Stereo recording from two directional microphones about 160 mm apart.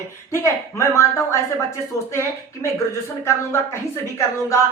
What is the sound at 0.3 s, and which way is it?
A woman's voice, 20° left (ahead or behind).